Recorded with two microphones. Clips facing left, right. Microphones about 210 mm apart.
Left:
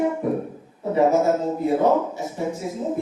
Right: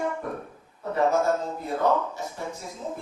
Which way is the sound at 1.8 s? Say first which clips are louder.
Left 5 dB; 20° left (ahead or behind).